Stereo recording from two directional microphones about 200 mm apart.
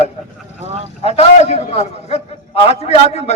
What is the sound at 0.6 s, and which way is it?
Speech, 30° right (ahead or behind).